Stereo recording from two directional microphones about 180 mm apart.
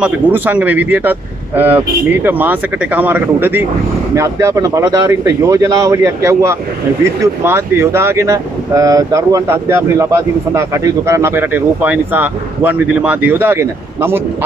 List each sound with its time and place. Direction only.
0.0 s speech: 10° right (ahead or behind)